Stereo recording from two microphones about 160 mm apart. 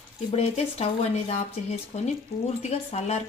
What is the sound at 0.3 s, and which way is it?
Speech, 40° left (ahead or behind).